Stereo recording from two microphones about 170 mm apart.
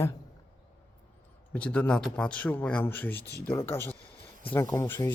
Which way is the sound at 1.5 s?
10° left (ahead or behind).